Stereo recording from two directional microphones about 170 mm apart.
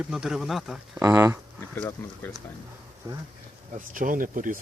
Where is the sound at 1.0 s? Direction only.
15° right (ahead or behind).